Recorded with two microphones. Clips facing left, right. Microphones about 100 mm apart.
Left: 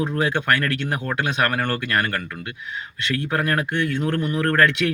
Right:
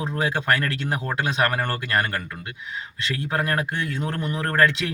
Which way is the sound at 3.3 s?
25° right (ahead or behind).